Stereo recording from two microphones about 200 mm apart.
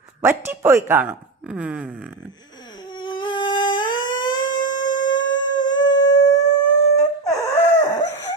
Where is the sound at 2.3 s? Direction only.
20° left (ahead or behind).